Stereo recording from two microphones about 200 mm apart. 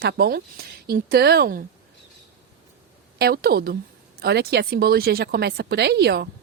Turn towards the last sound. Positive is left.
turn(degrees=-55)  # may be behind; listen again after turning